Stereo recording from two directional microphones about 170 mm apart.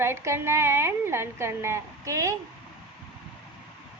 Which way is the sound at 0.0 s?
15° right (ahead or behind).